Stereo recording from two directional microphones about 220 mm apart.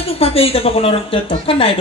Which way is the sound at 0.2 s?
25° left (ahead or behind).